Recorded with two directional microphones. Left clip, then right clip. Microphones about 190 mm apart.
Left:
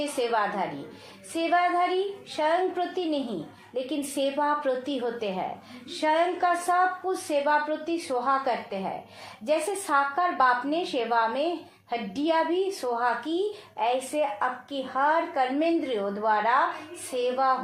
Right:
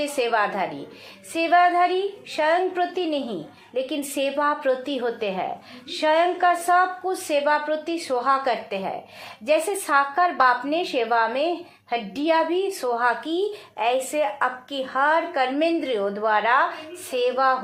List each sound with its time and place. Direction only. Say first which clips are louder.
0.2 s speech: right 4 dB; 25° right (ahead or behind)